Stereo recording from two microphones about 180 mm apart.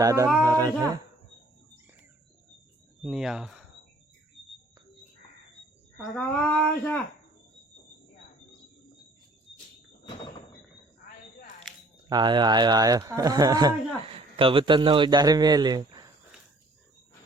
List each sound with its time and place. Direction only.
0.0 s speech: 20° right (ahead or behind)
3.0 s speech: centre (ahead or behind)
6.0 s speech: 5° left (ahead or behind)
12.0 s a man's voice: 25° right (ahead or behind)